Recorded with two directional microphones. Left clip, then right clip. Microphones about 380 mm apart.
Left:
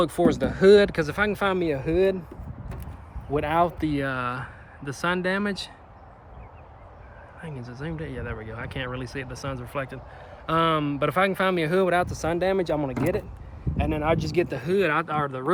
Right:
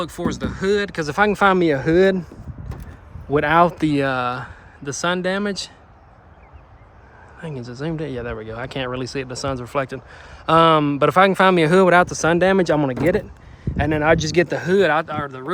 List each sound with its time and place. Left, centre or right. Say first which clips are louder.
0.0 s speech: left 3 dB; centre
1.0 s speech: right 8 dB; centre
3.3 s speech: right 8 dB; right; by 5.7 s centre
7.4 s speech: right 8 dB; centre